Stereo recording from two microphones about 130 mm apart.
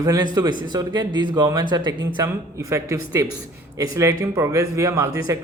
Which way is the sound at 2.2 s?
20° right (ahead or behind).